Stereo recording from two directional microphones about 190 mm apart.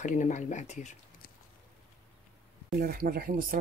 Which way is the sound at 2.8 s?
50° right (ahead or behind).